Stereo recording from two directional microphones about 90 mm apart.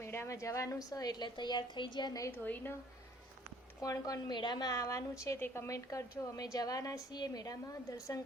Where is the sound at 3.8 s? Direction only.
40° left (ahead or behind).